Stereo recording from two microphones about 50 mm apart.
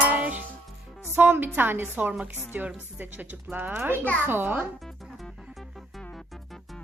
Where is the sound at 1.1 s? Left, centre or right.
Right.